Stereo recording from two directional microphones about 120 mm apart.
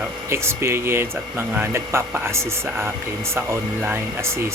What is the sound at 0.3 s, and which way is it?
Speech, 20° right (ahead or behind).